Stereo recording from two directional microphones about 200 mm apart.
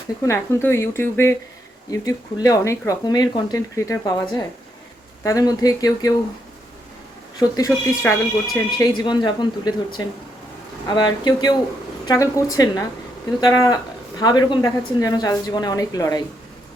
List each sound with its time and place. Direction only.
0.3 s speech: 15° left (ahead or behind)
7.3 s a woman's voice: 15° left (ahead or behind)
10.8 s a woman's voice: 20° left (ahead or behind)